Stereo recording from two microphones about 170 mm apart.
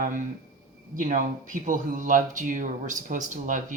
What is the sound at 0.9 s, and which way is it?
Speech, 50° right (ahead or behind).